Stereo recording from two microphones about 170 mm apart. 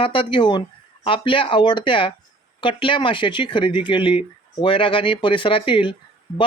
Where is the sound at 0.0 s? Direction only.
30° left (ahead or behind).